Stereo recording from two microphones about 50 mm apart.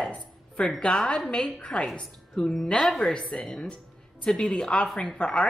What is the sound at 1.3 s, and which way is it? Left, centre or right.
Speech, left.